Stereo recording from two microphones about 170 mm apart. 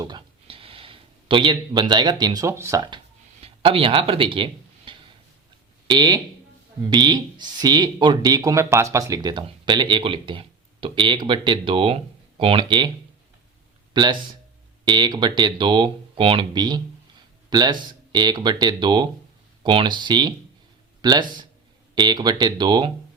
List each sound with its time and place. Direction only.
0.0 s speech: 25° right (ahead or behind)
3.4 s speech: 30° right (ahead or behind)
13.9 s speech: 25° right (ahead or behind)